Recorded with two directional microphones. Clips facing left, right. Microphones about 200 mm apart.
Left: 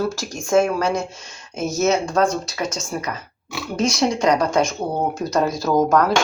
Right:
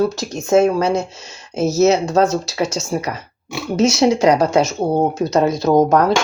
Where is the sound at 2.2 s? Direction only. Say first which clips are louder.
Right 4 dB; 30° right (ahead or behind).